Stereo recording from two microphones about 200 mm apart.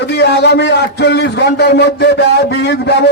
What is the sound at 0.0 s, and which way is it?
A man's voice, 55° left (ahead or behind).